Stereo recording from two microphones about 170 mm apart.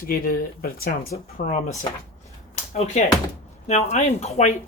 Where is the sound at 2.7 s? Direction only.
40° left (ahead or behind).